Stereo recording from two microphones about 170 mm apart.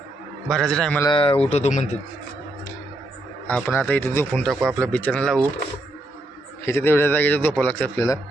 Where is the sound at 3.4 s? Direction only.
10° left (ahead or behind).